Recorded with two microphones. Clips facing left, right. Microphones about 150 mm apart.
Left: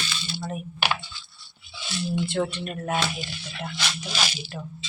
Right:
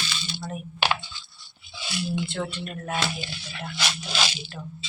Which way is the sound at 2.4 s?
10° left (ahead or behind).